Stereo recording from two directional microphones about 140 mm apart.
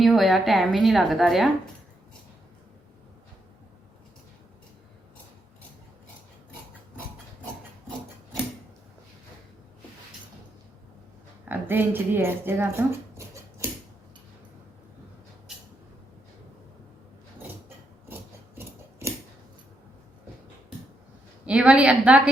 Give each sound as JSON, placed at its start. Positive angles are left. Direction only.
{"t": 0.0, "sound": "a woman's voice", "side_deg": 0}
{"t": 11.4, "sound": "speech", "side_deg": -15}
{"t": 18.1, "sound": "scissors", "side_deg": -15}
{"t": 21.4, "sound": "a woman's voice", "side_deg": -5}